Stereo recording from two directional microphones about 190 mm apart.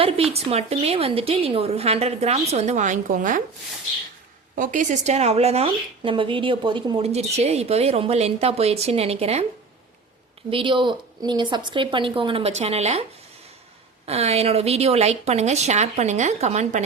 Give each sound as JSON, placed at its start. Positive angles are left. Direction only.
{"t": 0.0, "sound": "speech", "side_deg": -30}
{"t": 4.5, "sound": "speech", "side_deg": -45}
{"t": 10.5, "sound": "speech", "side_deg": -25}